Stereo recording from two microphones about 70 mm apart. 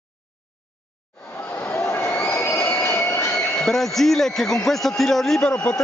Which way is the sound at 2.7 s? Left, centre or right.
Left.